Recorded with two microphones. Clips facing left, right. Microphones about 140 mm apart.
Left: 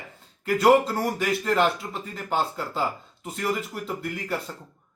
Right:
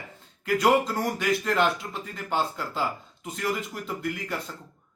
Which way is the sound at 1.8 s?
20° left (ahead or behind).